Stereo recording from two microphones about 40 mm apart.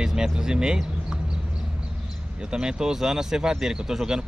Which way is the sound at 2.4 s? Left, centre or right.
Right.